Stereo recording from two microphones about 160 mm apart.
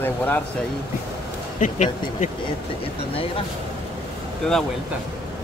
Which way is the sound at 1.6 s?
50° left (ahead or behind).